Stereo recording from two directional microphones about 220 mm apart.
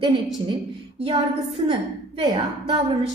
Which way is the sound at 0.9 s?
25° right (ahead or behind).